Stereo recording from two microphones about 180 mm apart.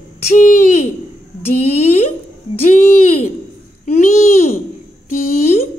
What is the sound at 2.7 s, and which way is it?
Speech, 40° left (ahead or behind).